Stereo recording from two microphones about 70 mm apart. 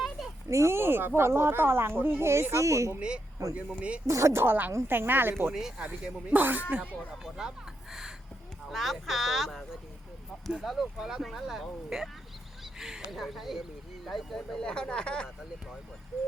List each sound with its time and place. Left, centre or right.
0.4 s speech: right
3.5 s speech: centre
4.0 s speech: right
5.5 s speech: centre; by 6.8 s right
7.4 s speech: centre
8.7 s speech: centre
10.6 s speech: centre